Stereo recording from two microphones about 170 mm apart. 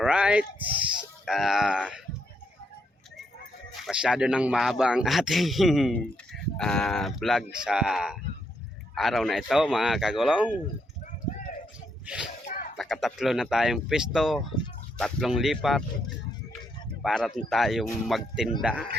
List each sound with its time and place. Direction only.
0.0 s speech: 5° right (ahead or behind)
3.8 s speech: 5° right (ahead or behind)
12.0 s speech: 5° right (ahead or behind)
12.5 s a sound: 50° left (ahead or behind)
12.7 s speech: centre (ahead or behind)
17.0 s a man's voice: centre (ahead or behind)